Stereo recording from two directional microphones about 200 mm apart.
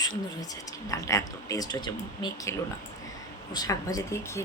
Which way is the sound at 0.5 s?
15° left (ahead or behind).